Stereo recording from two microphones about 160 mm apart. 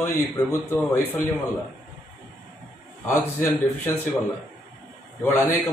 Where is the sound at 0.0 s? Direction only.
15° left (ahead or behind).